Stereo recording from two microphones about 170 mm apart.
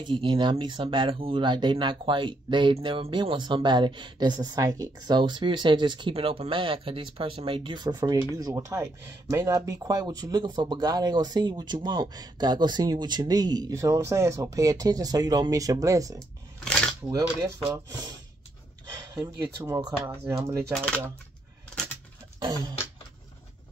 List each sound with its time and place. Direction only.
0.0 s speech: 30° right (ahead or behind)
16.2 s a sound: 5° left (ahead or behind)
18.9 s speech: 20° right (ahead or behind)
20.7 s speech: 5° left (ahead or behind)
22.4 s speech: 25° right (ahead or behind)